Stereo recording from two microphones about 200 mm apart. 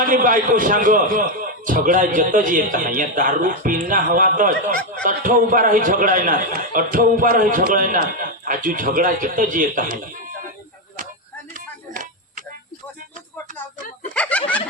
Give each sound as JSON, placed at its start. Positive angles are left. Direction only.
{"t": 0.0, "sound": "a man's voice", "side_deg": -40}
{"t": 14.1, "sound": "snicker", "side_deg": 5}